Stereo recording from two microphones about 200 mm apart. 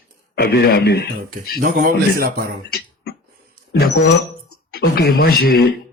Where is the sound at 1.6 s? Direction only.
40° right (ahead or behind).